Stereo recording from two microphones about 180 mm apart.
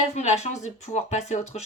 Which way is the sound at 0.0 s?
40° left (ahead or behind).